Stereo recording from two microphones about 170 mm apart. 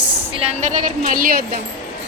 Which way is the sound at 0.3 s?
40° right (ahead or behind).